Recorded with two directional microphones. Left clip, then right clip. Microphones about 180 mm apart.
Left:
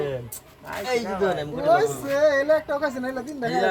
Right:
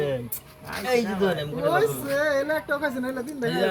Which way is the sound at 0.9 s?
10° left (ahead or behind).